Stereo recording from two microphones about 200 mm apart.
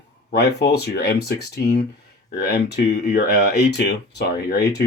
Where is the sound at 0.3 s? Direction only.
55° left (ahead or behind).